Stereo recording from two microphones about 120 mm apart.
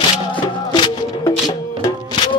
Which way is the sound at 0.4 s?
35° left (ahead or behind).